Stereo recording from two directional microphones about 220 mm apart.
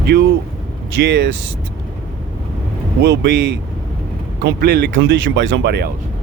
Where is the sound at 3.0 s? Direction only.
50° right (ahead or behind).